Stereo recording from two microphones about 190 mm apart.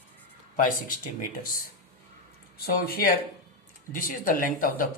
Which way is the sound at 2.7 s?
50° left (ahead or behind).